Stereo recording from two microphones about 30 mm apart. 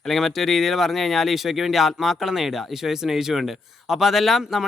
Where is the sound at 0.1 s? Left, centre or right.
Centre.